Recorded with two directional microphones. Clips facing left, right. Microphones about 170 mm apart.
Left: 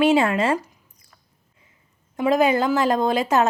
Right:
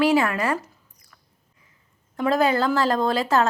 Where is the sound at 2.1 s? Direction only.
15° left (ahead or behind).